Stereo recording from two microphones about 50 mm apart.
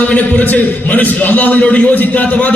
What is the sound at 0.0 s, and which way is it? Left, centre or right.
A man's voice, left.